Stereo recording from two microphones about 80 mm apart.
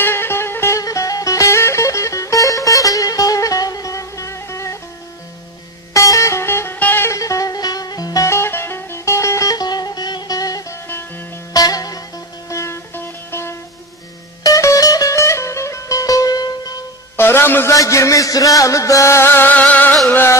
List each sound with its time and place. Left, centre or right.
0.0 s music: left
0.7 s music: left
5.9 s music: left
7.1 s music: left
8.3 s music: left
10.9 s music: left
11.5 s music: left
12.4 s music: left
14.4 s music: left
17.2 s a sound: left
17.7 s music: left; by 20.0 s centre